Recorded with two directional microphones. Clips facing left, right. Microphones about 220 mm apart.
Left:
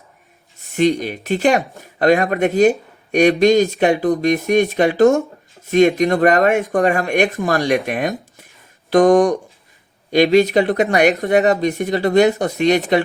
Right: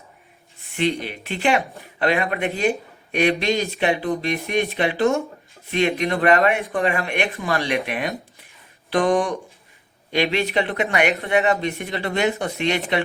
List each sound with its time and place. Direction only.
0.6 s speech: 45° left (ahead or behind)